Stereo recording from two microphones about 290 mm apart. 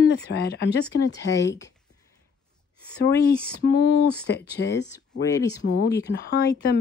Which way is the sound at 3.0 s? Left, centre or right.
Left.